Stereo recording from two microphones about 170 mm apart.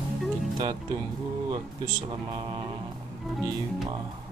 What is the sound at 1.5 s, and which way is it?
Speech, 30° right (ahead or behind).